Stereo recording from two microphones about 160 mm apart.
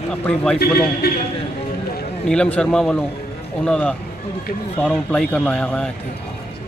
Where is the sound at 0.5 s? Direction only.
75° left (ahead or behind).